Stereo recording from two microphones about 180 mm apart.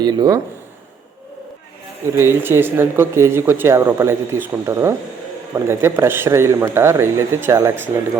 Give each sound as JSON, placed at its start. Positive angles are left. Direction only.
{"t": 0.0, "sound": "speech", "side_deg": -25}
{"t": 2.0, "sound": "speech", "side_deg": -15}